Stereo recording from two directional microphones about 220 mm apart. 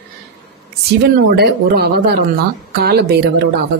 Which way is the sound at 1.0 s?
45° right (ahead or behind).